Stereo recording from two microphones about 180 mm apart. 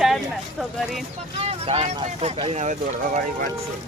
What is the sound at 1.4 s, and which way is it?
Speech, 35° right (ahead or behind).